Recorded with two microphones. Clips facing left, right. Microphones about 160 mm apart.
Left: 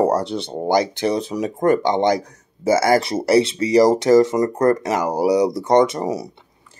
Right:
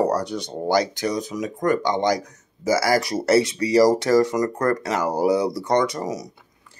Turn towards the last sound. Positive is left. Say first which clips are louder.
# left 5 dB
turn(degrees=25)  # may be behind; listen again after turning